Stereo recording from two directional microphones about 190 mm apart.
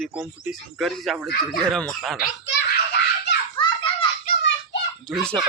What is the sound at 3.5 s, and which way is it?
Children playing, 25° left (ahead or behind).